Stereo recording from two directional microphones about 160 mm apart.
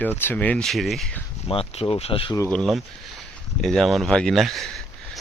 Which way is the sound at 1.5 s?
35° left (ahead or behind).